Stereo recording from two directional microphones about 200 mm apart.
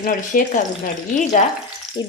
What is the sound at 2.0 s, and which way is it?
Speech, 20° left (ahead or behind).